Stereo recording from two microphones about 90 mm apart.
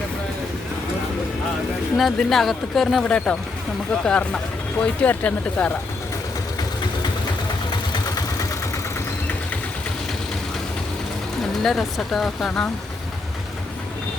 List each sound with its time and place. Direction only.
2.0 s speech: 5° left (ahead or behind)
3.0 s speech: 10° left (ahead or behind)
11.6 s speech: centre (ahead or behind)